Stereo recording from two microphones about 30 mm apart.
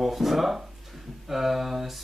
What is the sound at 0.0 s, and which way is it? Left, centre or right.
Speech, centre.